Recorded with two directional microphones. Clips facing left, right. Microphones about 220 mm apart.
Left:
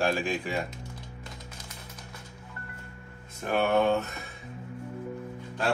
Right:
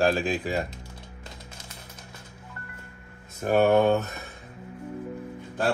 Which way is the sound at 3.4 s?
40° right (ahead or behind).